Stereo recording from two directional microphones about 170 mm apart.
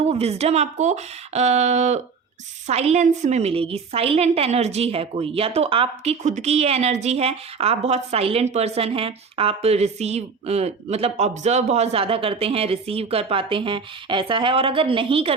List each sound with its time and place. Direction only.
0.0 s a woman's voice: 35° right (ahead or behind)